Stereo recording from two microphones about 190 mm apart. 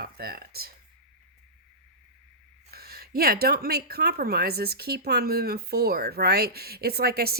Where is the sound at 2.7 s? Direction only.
55° right (ahead or behind).